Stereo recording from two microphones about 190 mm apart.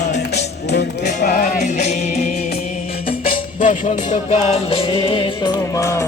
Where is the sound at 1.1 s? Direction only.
40° left (ahead or behind).